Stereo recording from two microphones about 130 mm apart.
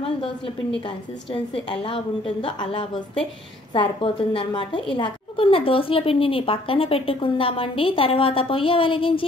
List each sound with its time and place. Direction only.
0.7 s a woman's voice: 45° left (ahead or behind)